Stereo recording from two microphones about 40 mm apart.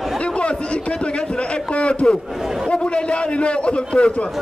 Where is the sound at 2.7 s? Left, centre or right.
Left.